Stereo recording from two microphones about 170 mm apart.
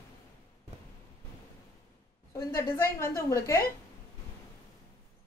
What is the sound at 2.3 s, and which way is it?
A woman's voice, 20° left (ahead or behind).